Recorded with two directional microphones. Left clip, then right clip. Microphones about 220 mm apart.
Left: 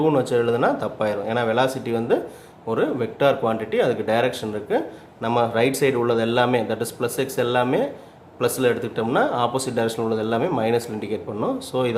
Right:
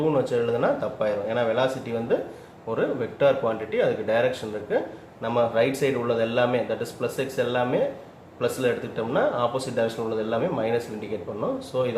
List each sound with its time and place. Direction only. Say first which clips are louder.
0.0 s speech: left 4 dB; 50° left (ahead or behind)